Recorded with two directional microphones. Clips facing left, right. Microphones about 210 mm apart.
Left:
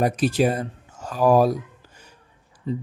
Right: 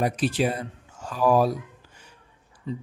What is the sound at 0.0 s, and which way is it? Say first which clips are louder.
Speech: left 4 dB; 45° left (ahead or behind).